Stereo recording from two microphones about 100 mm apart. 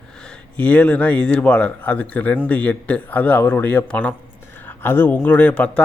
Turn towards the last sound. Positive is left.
turn(degrees=15)  # may be behind; listen again after turning